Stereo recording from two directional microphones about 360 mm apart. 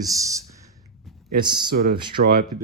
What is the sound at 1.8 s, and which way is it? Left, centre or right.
Speech, right.